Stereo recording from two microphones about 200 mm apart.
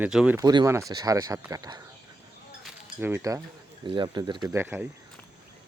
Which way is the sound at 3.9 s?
20° right (ahead or behind).